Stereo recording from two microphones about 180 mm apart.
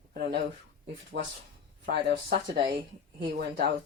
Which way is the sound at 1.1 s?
75° right (ahead or behind).